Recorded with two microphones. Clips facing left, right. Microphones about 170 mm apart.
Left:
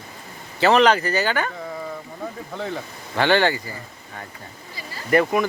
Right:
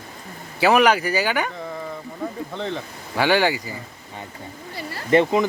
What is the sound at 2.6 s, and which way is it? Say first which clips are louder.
Speech: even; 10° left (ahead or behind).